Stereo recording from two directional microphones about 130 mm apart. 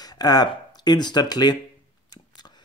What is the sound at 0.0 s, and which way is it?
Speech, 30° left (ahead or behind).